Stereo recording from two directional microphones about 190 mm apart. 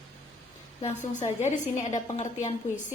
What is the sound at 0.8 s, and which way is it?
A woman's voice, 35° left (ahead or behind).